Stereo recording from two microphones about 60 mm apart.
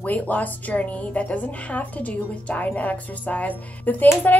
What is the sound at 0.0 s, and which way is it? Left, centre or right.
A woman's voice, left.